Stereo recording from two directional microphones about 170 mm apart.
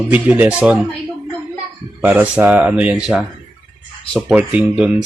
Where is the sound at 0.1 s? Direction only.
10° right (ahead or behind).